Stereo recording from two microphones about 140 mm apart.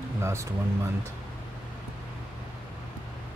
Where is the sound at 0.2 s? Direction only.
20° right (ahead or behind).